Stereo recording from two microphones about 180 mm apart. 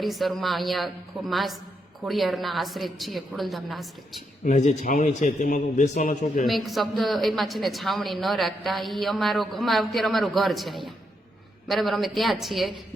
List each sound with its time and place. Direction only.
0.0 s speech: centre (ahead or behind)
4.4 s a man's voice: 40° left (ahead or behind)
6.4 s speech: centre (ahead or behind)